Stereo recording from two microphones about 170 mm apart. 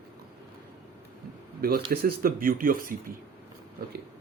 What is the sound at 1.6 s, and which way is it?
Speech, 60° right (ahead or behind).